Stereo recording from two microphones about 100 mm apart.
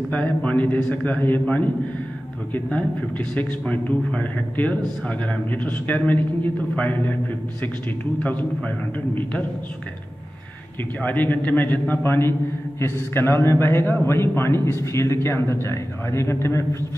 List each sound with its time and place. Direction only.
0.1 s a man's voice: 15° left (ahead or behind)
2.5 s a man's voice: 15° left (ahead or behind)
8.2 s a man's voice: 15° left (ahead or behind)
11.0 s a man's voice: 15° left (ahead or behind)